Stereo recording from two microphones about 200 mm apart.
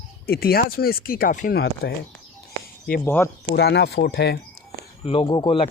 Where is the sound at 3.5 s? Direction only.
60° left (ahead or behind).